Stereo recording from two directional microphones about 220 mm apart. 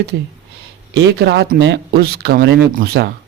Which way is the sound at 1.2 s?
50° right (ahead or behind).